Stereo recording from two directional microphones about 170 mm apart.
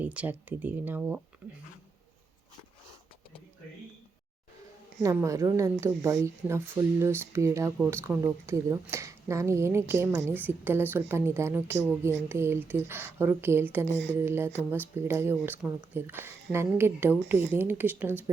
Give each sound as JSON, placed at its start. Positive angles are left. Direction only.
{"t": 0.0, "sound": "speech", "side_deg": -10}
{"t": 4.9, "sound": "speech", "side_deg": -20}
{"t": 13.8, "sound": "speech", "side_deg": -90}
{"t": 14.2, "sound": "speech", "side_deg": -15}